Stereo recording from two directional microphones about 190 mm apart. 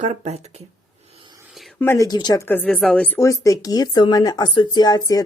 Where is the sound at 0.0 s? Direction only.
35° right (ahead or behind).